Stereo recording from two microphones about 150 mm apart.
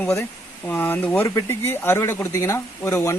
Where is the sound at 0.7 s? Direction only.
10° left (ahead or behind).